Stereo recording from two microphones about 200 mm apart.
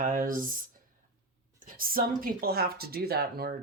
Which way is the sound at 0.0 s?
45° right (ahead or behind).